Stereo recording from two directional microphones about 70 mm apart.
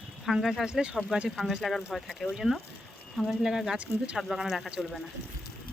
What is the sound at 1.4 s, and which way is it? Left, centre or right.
Speech, centre.